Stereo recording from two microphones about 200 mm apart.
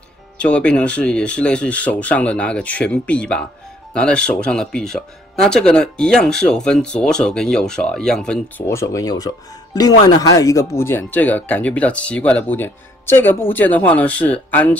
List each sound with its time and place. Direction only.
0.4 s speech: 5° left (ahead or behind)
8.6 s speech: 15° left (ahead or behind)